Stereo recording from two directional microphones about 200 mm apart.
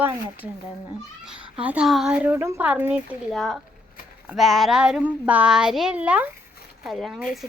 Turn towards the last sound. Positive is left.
turn(degrees=0)  # may be behind; listen again after turning